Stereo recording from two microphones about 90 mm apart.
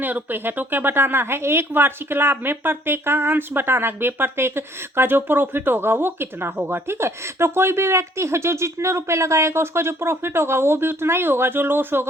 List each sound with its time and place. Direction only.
0.0 s speech: 20° right (ahead or behind)